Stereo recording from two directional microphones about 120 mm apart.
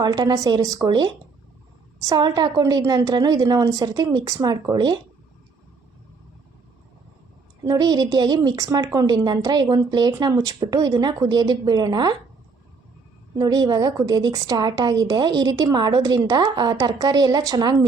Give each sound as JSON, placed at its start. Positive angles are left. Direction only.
{"t": 0.0, "sound": "a woman's voice", "side_deg": -35}
{"t": 7.6, "sound": "a woman's voice", "side_deg": -35}
{"t": 13.3, "sound": "a woman's voice", "side_deg": -35}